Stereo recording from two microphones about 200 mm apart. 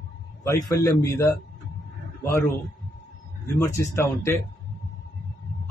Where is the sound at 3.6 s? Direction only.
15° left (ahead or behind).